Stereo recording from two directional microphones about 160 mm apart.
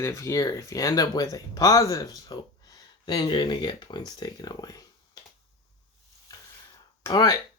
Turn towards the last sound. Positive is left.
turn(degrees=25)  # may be behind; listen again after turning